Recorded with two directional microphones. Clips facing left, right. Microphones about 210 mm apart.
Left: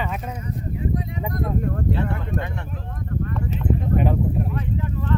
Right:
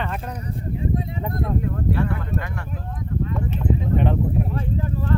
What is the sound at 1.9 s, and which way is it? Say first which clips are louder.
Speech: right 1 dB; 20° left (ahead or behind).